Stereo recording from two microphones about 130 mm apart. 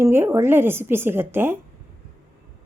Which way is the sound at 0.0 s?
20° right (ahead or behind).